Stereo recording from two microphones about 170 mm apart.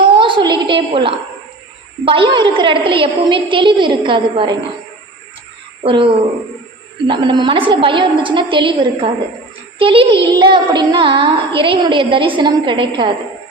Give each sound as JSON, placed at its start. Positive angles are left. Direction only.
{"t": 0.2, "sound": "a sound", "side_deg": -30}
{"t": 2.0, "sound": "a woman's voice", "side_deg": -30}
{"t": 5.8, "sound": "a child's voice", "side_deg": -30}